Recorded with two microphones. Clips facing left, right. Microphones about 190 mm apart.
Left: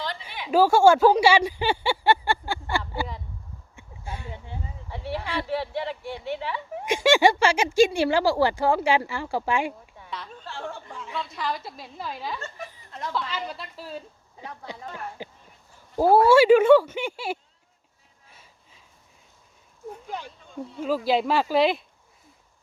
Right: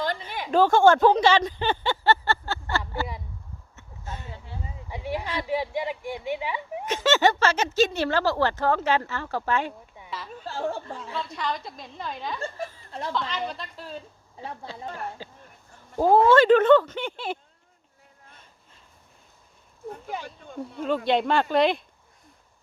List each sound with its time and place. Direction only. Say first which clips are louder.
0.3 s a sound: right 4 dB; 45° right (ahead or behind)
0.5 s speech: left 1 dB; 10° left (ahead or behind)
3.8 s a sound: left 1 dB; 10° left (ahead or behind)
4.9 s speech: right 1 dB; 15° right (ahead or behind)
6.8 s speech: left 3 dB; 10° left (ahead or behind)
10.4 s speech: right 10 dB; 40° right (ahead or behind)
11.1 s a woman's voice: even; centre (ahead or behind)
12.9 s a woman's voice: even; 30° right (ahead or behind)
13.3 s a woman's voice: right 1 dB; 5° left (ahead or behind)
14.4 s speech: right 3 dB; 25° right (ahead or behind)
15.2 s speech: left 3 dB; 15° left (ahead or behind)
18.3 s a sound: left 3 dB; 5° left (ahead or behind)
20.8 s a woman's voice: even; 5° left (ahead or behind)